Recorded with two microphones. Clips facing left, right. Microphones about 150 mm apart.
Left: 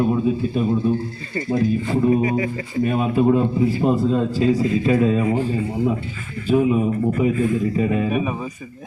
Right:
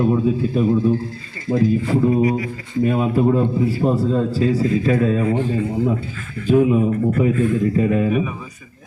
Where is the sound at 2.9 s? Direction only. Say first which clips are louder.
Even; 15° left (ahead or behind).